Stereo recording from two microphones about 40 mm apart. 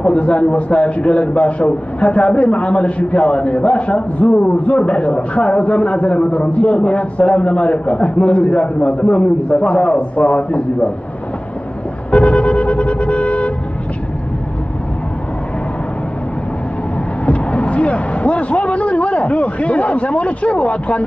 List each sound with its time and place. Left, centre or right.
0.0 s a man's voice: left
12.1 s vehicle: left
17.3 s a man's voice: left